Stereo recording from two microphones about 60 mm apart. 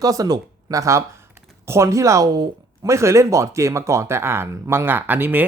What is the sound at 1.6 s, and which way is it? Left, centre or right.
Speech, right.